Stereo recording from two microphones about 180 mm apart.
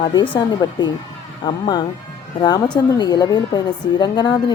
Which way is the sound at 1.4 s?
25° left (ahead or behind).